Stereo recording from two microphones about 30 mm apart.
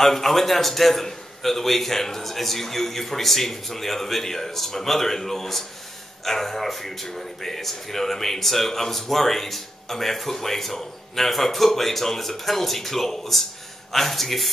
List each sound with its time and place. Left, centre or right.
0.0 s speech: centre